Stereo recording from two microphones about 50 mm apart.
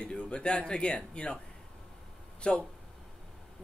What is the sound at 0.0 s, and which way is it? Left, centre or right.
Speech, centre.